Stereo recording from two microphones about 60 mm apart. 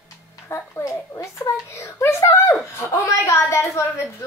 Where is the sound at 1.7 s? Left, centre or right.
Left.